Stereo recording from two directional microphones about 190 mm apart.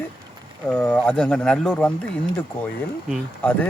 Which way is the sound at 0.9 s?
5° left (ahead or behind).